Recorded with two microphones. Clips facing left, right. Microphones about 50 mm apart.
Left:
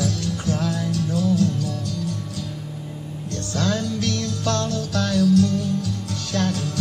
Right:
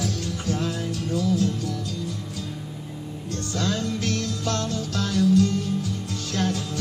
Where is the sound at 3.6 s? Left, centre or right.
Left.